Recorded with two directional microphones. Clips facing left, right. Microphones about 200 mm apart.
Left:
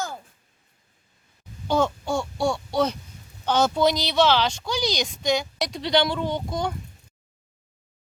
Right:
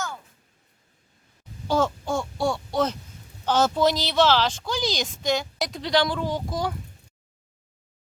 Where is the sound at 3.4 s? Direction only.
5° right (ahead or behind).